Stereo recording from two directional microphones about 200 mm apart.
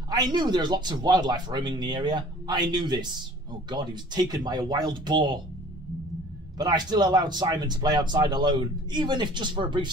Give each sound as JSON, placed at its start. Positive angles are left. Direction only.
{"t": 0.1, "sound": "speech", "side_deg": -20}
{"t": 6.6, "sound": "speech", "side_deg": -20}